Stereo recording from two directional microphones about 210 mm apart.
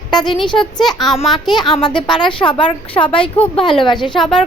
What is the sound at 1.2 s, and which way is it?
Speech, centre (ahead or behind).